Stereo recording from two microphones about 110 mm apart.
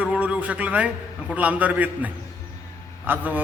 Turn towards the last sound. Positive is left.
turn(degrees=-15)  # may be behind; listen again after turning